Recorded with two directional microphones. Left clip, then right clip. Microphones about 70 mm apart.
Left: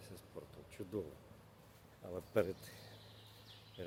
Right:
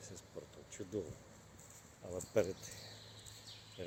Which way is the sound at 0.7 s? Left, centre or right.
Left.